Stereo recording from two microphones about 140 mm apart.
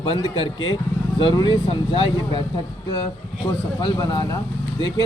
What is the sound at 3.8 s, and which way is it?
Speech, 30° left (ahead or behind).